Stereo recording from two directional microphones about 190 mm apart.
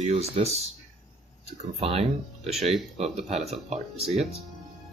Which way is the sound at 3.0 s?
35° right (ahead or behind).